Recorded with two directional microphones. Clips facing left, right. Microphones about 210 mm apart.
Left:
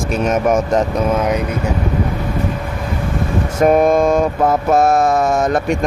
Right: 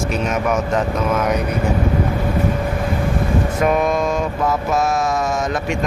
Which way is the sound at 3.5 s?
45° left (ahead or behind).